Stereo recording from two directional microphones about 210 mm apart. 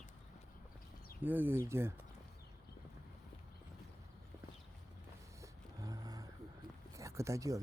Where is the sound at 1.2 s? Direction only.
10° right (ahead or behind).